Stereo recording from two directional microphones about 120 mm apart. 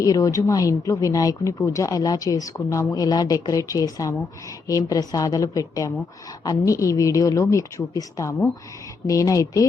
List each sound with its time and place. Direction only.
0.0 s speech: 30° left (ahead or behind)